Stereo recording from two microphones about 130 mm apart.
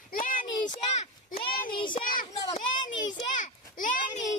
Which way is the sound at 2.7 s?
75° left (ahead or behind).